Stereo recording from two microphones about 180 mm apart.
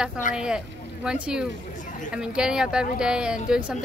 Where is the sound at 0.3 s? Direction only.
45° left (ahead or behind).